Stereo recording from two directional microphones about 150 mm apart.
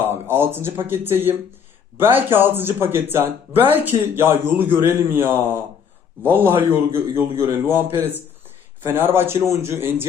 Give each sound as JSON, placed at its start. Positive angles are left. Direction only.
{"t": 0.0, "sound": "speech", "side_deg": -15}